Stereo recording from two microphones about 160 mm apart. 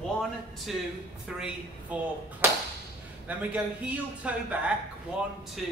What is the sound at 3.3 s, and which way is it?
Speech, 10° right (ahead or behind).